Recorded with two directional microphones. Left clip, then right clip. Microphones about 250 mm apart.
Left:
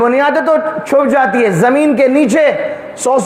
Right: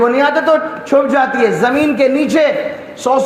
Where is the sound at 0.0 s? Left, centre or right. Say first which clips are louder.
Left 1 dB; left.